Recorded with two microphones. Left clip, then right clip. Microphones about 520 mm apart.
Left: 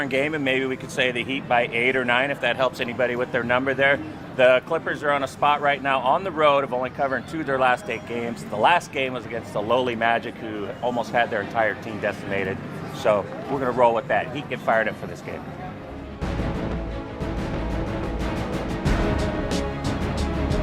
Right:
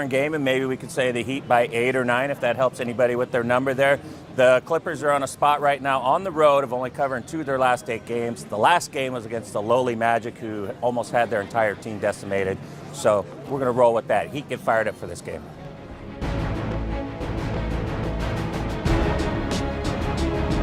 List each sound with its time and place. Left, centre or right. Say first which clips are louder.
0.0 s speech: right 1 dB; right
19.1 s music: even; centre